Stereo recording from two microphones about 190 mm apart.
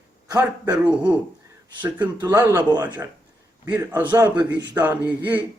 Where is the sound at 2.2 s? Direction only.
15° right (ahead or behind).